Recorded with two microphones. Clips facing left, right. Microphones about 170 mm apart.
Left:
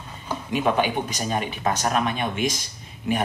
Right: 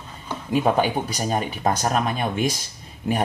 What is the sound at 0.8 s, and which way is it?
Speech, 40° right (ahead or behind).